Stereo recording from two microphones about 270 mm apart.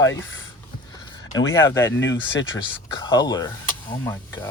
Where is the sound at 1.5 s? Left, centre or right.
Centre.